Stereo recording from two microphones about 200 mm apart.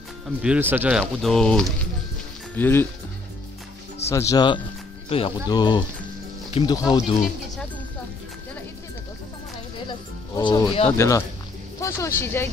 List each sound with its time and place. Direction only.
0.4 s speech: 10° right (ahead or behind); by 2.9 s 10° left (ahead or behind)
4.1 s speech: 15° left (ahead or behind)
9.8 s music: 20° left (ahead or behind)
10.9 s speech: 15° left (ahead or behind)